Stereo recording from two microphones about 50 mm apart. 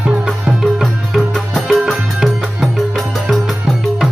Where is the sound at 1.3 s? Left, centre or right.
Centre.